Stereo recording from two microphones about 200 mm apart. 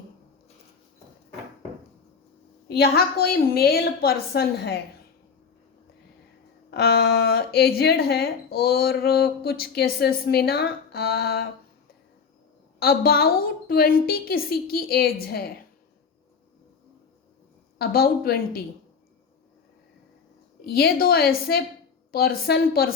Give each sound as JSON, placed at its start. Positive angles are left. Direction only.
{"t": 2.6, "sound": "speech", "side_deg": 55}
{"t": 6.7, "sound": "speech", "side_deg": 55}
{"t": 12.8, "sound": "speech", "side_deg": 50}
{"t": 17.7, "sound": "speech", "side_deg": 50}
{"t": 20.7, "sound": "speech", "side_deg": 50}